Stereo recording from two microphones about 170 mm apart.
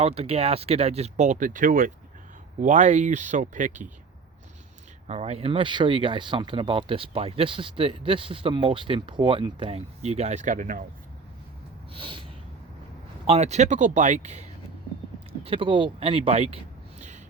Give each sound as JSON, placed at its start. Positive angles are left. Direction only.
{"t": 0.0, "sound": "speech", "side_deg": -35}
{"t": 5.0, "sound": "speech", "side_deg": -40}
{"t": 11.9, "sound": "a sound", "side_deg": -30}
{"t": 13.2, "sound": "speech", "side_deg": -40}
{"t": 15.4, "sound": "speech", "side_deg": -30}